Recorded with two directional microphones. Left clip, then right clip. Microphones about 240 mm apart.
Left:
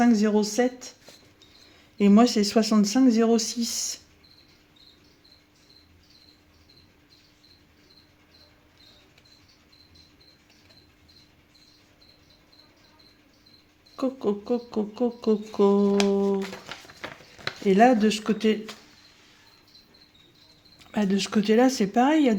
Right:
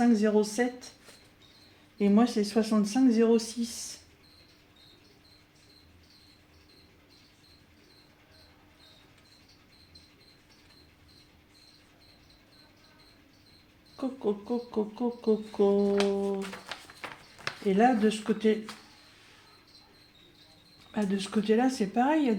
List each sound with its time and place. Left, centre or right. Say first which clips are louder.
0.0 s speech: left 3 dB; left
2.0 s speech: left 6 dB; left
13.9 s speech: left 5 dB; left
16.6 s a sound: left 2 dB; centre
17.7 s speech: left 6 dB; left
20.7 s speech: left 6 dB; left